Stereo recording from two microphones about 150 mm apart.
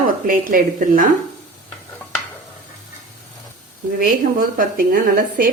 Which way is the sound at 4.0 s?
65° right (ahead or behind).